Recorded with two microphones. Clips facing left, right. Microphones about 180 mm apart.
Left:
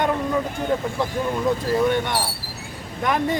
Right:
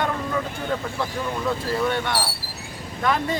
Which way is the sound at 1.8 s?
15° left (ahead or behind).